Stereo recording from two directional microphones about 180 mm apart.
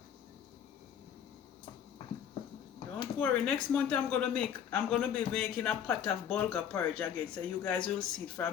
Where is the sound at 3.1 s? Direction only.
5° left (ahead or behind).